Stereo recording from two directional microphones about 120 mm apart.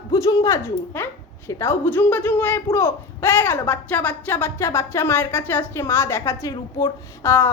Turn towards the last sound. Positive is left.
turn(degrees=20)  # may be behind; listen again after turning